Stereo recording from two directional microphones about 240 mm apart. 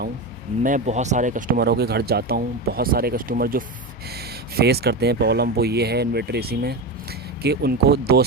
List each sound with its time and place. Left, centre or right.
0.6 s speech: right